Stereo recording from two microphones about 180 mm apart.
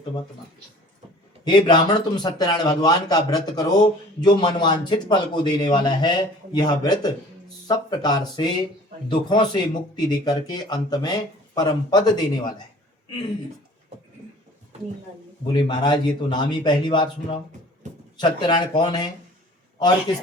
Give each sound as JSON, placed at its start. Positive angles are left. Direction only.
{"t": 1.5, "sound": "speech", "side_deg": 25}
{"t": 15.4, "sound": "speech", "side_deg": 25}